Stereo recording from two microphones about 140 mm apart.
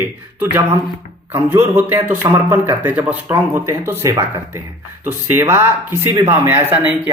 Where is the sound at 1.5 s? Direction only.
15° right (ahead or behind).